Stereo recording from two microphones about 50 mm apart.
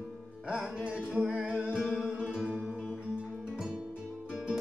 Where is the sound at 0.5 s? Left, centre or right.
Centre.